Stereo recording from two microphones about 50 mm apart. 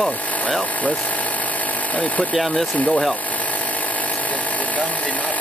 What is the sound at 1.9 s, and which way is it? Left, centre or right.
Speech, left.